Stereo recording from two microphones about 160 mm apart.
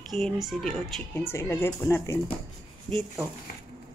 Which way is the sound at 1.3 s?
15° left (ahead or behind).